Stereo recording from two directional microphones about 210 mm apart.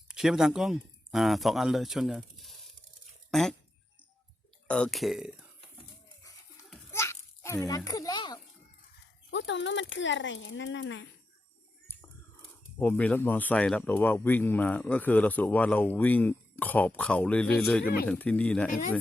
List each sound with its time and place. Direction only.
0.1 s speech: centre (ahead or behind)
4.7 s speech: 5° left (ahead or behind)
6.9 s a sound: 15° left (ahead or behind)
9.3 s speech: 60° left (ahead or behind)
12.8 s speech: 10° left (ahead or behind)